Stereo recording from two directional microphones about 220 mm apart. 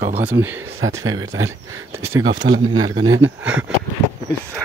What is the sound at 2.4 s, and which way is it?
Speech, 45° right (ahead or behind).